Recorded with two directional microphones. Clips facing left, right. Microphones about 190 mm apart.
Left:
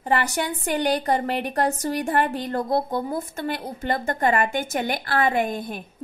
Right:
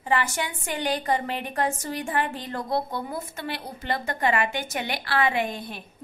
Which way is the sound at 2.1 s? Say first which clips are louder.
Left 5 dB; 60° left (ahead or behind).